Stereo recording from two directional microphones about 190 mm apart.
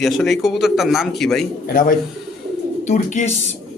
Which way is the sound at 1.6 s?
50° left (ahead or behind).